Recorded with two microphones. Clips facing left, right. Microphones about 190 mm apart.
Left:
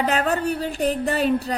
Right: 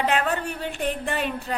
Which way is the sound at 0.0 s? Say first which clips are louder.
Left 3 dB; 40° left (ahead or behind).